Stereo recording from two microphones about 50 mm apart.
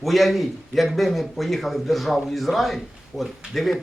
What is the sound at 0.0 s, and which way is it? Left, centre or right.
A man's voice, centre.